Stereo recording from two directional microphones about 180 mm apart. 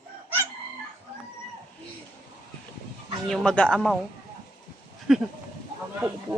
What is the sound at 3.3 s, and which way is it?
Speech, 5° left (ahead or behind).